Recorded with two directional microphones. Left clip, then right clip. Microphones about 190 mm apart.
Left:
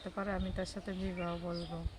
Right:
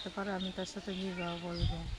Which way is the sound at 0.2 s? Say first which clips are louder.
Left 1 dB; 10° left (ahead or behind).